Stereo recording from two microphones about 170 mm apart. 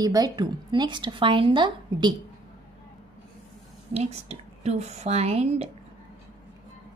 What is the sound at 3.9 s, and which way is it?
A woman's voice, 40° right (ahead or behind).